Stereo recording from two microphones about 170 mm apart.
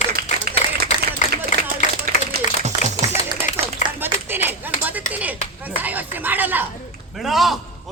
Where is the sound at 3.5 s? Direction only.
50° left (ahead or behind).